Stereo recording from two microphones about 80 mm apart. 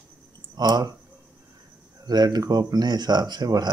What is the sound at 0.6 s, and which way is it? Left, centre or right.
Speech, right.